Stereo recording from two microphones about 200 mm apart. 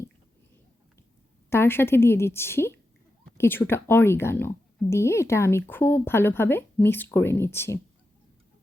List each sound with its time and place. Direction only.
1.5 s a woman's voice: 10° left (ahead or behind)